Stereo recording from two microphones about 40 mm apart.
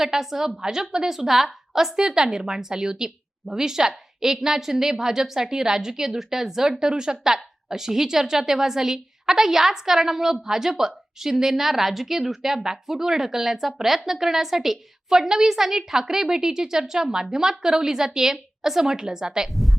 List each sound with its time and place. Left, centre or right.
0.0 s a woman's voice: centre